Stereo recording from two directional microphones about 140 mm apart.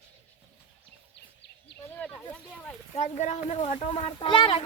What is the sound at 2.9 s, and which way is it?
Speech, 55° left (ahead or behind).